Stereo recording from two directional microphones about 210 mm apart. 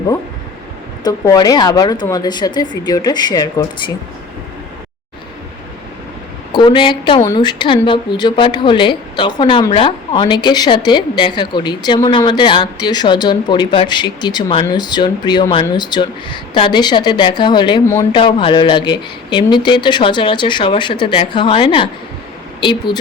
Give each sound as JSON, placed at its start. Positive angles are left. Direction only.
{"t": 1.0, "sound": "speech", "side_deg": 20}
{"t": 6.5, "sound": "speech", "side_deg": 20}